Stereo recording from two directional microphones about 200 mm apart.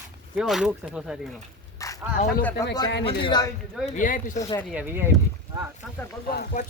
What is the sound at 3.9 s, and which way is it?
Speech, 40° left (ahead or behind).